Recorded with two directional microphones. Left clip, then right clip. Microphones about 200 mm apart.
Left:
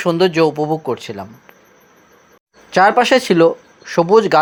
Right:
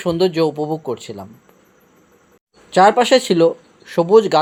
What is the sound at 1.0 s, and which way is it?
Speech, 10° left (ahead or behind).